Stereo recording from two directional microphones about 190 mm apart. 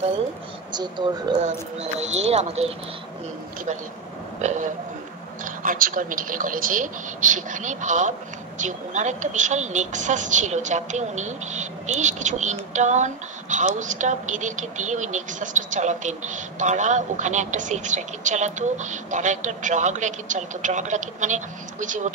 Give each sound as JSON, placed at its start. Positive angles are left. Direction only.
{"t": 1.0, "sound": "speech", "side_deg": -25}
{"t": 1.4, "sound": "a woman's voice", "side_deg": -35}
{"t": 4.4, "sound": "a woman's voice", "side_deg": -40}